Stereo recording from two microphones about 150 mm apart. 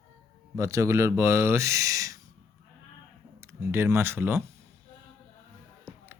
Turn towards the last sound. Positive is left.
turn(degrees=-15)  # may be behind; listen again after turning